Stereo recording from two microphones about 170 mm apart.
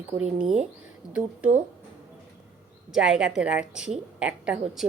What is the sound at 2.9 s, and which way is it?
A woman's voice, 5° right (ahead or behind).